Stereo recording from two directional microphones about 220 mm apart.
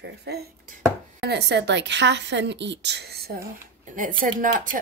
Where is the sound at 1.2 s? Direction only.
50° right (ahead or behind).